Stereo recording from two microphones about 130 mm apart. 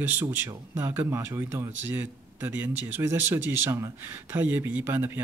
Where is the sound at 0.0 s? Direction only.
15° right (ahead or behind).